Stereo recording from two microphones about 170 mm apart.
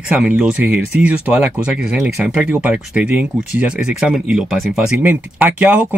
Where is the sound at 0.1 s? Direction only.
5° right (ahead or behind).